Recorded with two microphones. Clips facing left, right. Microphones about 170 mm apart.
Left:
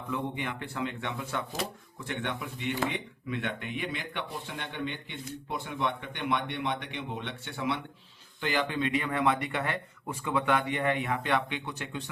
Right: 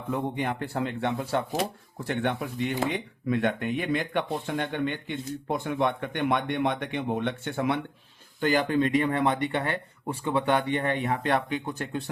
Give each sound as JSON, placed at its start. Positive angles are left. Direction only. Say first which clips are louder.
{"t": 0.1, "sound": "speech", "louder": "right 5 dB", "side_deg": -40}